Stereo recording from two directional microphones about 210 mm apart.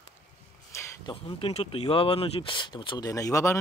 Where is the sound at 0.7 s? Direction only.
15° left (ahead or behind).